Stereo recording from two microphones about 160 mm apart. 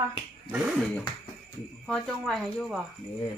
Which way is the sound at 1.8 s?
Centre (ahead or behind).